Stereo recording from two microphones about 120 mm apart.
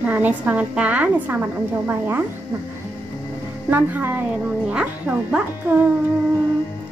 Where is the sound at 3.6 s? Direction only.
15° right (ahead or behind).